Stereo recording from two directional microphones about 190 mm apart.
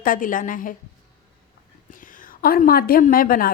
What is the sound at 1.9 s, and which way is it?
A woman's voice, 45° left (ahead or behind).